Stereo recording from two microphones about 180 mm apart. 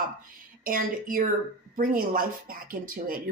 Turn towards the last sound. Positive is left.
turn(degrees=-50)  # may be behind; listen again after turning